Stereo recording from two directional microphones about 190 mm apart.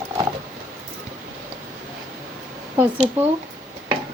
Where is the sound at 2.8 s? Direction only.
5° right (ahead or behind).